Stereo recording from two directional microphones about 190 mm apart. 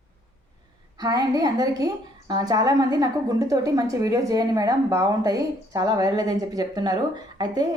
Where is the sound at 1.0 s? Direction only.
20° right (ahead or behind).